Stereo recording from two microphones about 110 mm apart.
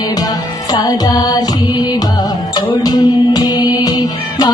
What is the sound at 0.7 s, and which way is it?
Music, 35° left (ahead or behind).